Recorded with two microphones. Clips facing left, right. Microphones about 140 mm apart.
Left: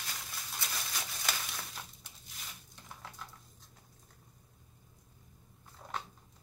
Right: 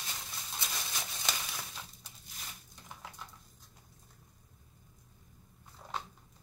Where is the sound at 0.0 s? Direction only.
20° right (ahead or behind).